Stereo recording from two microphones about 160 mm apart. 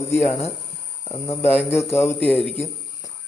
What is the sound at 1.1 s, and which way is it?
Speech, 15° left (ahead or behind).